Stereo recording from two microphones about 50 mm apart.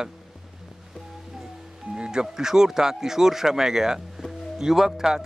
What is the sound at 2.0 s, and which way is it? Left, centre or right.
Speech, centre.